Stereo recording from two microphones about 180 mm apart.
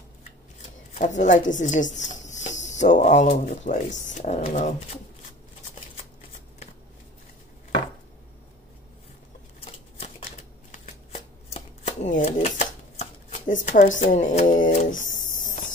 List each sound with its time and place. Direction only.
0.6 s speech: 40° left (ahead or behind)
9.7 s shuffling cards: 35° left (ahead or behind)
15.3 s cricket: 45° left (ahead or behind)